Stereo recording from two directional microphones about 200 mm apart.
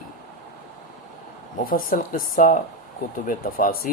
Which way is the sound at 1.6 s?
45° left (ahead or behind).